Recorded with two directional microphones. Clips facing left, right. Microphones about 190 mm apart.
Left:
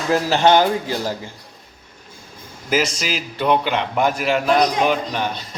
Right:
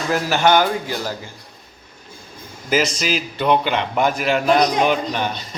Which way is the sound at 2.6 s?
5° left (ahead or behind).